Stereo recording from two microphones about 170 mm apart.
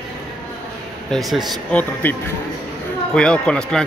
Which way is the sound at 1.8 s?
10° left (ahead or behind).